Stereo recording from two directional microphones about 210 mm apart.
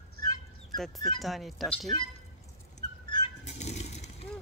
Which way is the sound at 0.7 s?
Centre (ahead or behind).